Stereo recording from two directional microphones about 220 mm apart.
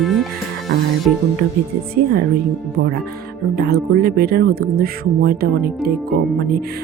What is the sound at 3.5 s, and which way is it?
Speech, 45° right (ahead or behind).